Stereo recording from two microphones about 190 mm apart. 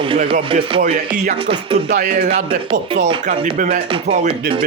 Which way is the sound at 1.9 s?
40° right (ahead or behind).